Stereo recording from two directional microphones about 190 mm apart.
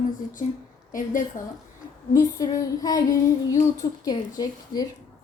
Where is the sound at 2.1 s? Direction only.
20° left (ahead or behind).